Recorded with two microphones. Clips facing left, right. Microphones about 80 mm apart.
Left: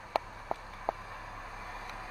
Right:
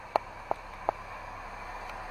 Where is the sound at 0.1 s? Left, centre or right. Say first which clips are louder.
Right 4 dB; centre.